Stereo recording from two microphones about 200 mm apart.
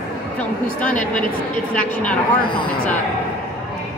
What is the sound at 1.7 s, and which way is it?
Speech, 5° left (ahead or behind).